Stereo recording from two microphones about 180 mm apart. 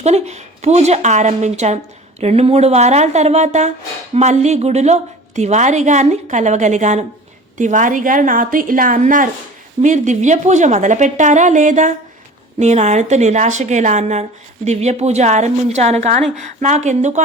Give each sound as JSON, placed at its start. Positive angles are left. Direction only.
{"t": 0.0, "sound": "a woman's voice", "side_deg": -35}